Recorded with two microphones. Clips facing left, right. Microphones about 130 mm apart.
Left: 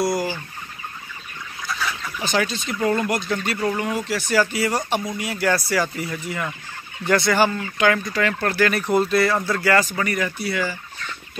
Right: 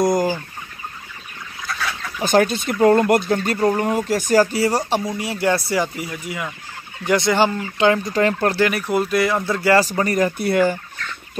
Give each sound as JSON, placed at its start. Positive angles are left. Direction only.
{"t": 0.0, "sound": "chicken", "side_deg": -45}
{"t": 2.2, "sound": "speech", "side_deg": -50}
{"t": 3.3, "sound": "speech", "side_deg": -35}
{"t": 5.9, "sound": "speech", "side_deg": -10}
{"t": 8.0, "sound": "speech", "side_deg": -35}
{"t": 8.6, "sound": "speech", "side_deg": -10}
{"t": 9.8, "sound": "speech", "side_deg": -40}